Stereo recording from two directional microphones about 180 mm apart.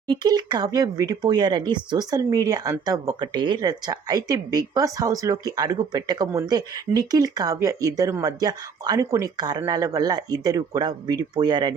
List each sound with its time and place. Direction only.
0.1 s speech: 25° right (ahead or behind)